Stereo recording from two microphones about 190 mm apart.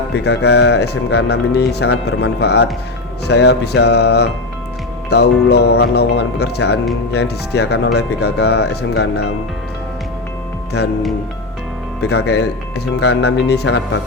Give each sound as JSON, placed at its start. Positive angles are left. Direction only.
{"t": 0.1, "sound": "speech", "side_deg": 60}
{"t": 10.8, "sound": "speech", "side_deg": 60}
{"t": 11.9, "sound": "speech", "side_deg": 60}